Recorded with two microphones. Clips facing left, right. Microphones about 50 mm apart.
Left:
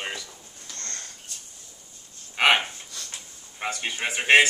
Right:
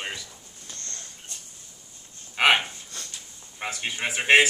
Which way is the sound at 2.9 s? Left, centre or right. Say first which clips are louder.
Even; right.